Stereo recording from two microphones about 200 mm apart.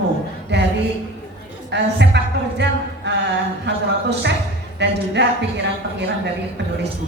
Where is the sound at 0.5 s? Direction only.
60° right (ahead or behind).